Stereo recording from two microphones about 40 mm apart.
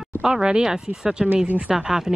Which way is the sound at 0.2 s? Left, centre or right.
Centre.